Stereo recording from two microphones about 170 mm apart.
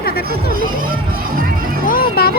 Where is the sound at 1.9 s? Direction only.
60° left (ahead or behind).